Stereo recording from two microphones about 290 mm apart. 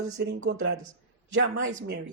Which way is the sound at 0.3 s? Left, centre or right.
Right.